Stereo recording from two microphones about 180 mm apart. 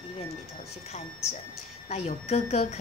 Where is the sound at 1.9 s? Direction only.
35° left (ahead or behind).